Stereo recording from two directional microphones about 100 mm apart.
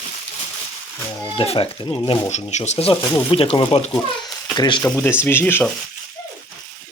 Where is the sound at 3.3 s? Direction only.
65° left (ahead or behind).